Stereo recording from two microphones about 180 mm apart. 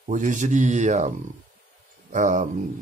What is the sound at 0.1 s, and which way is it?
Speech, 45° right (ahead or behind).